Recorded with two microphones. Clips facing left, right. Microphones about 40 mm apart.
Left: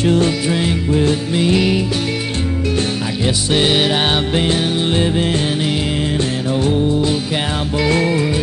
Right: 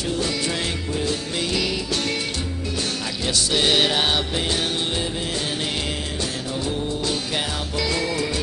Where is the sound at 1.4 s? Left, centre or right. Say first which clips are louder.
Left 10 dB; left.